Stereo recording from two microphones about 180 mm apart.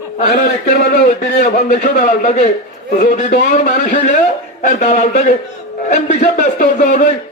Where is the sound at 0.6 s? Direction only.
55° left (ahead or behind).